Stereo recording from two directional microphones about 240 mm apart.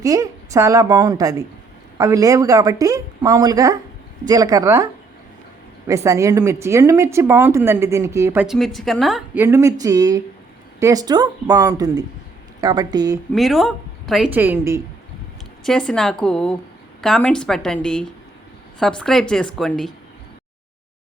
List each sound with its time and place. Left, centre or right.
0.0 s a woman's voice: centre
5.9 s a woman's voice: centre
13.3 s a woman's voice: centre
15.6 s a woman's voice: centre